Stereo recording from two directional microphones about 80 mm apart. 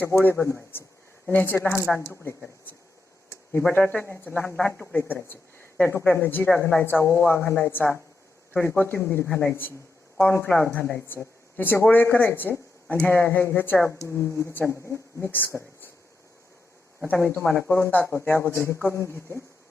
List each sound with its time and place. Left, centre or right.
0.0 s speech: left
3.5 s speech: left
4.7 s a woman's voice: centre
4.9 s speech: left
17.2 s speech: left